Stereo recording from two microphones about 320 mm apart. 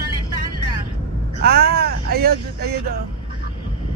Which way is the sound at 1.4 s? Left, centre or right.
Right.